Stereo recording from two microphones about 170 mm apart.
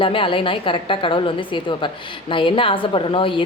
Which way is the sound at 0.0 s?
30° left (ahead or behind).